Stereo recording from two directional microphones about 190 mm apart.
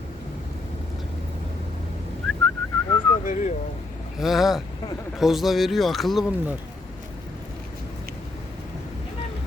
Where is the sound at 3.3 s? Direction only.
40° left (ahead or behind).